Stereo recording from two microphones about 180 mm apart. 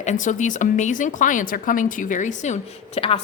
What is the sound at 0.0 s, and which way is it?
Speech, 45° left (ahead or behind).